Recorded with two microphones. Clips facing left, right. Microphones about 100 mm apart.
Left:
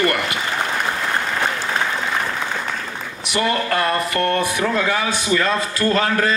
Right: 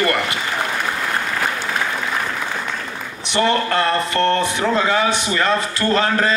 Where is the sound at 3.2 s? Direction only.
30° right (ahead or behind).